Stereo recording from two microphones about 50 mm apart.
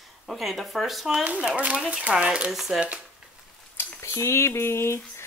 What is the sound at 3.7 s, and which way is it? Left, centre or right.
Speech, left.